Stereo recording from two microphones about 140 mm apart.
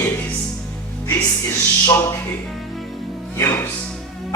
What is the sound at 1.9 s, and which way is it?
Music, 15° left (ahead or behind).